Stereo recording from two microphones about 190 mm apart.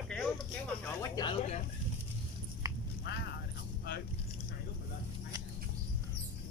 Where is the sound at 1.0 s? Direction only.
25° left (ahead or behind).